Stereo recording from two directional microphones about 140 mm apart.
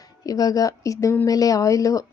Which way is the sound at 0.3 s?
25° left (ahead or behind).